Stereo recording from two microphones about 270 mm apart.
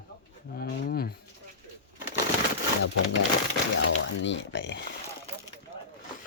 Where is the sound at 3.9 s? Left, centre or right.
Left.